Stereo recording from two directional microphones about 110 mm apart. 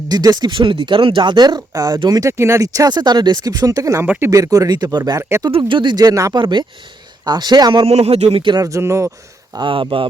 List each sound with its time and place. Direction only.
0.1 s speech: 40° right (ahead or behind)
4.0 s speech: 15° right (ahead or behind)
4.3 s speech: 30° right (ahead or behind)
5.5 s speech: 50° right (ahead or behind); by 6.3 s 35° right (ahead or behind)
6.3 s speech: 45° right (ahead or behind)
7.9 s speech: 70° right (ahead or behind); by 8.6 s 50° right (ahead or behind)
8.6 s speech: 25° right (ahead or behind)
9.6 s speech: 45° right (ahead or behind)